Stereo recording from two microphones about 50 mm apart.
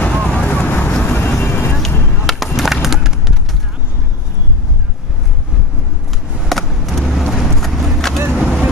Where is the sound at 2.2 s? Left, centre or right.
Centre.